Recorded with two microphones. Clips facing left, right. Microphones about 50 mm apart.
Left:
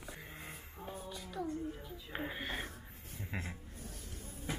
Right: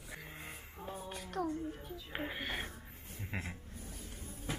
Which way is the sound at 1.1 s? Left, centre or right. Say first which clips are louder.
Right 4 dB; right.